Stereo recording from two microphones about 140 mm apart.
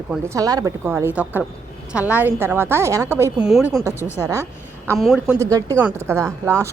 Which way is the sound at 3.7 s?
20° right (ahead or behind).